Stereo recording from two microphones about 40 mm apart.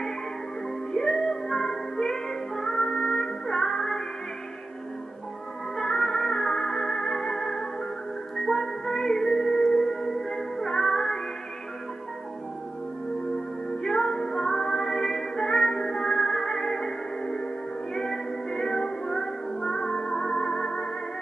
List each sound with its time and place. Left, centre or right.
0.9 s music: centre
5.8 s music: centre
13.8 s music: centre